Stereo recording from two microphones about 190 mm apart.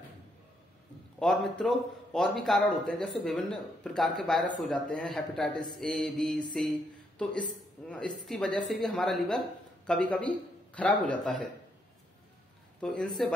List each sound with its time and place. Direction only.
1.2 s speech: centre (ahead or behind)
7.9 s speech: 5° left (ahead or behind)
12.8 s speech: 5° left (ahead or behind)